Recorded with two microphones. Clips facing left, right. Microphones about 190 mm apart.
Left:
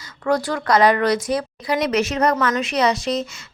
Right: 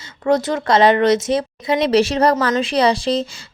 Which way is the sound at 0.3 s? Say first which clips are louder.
Right 3 dB; 20° right (ahead or behind).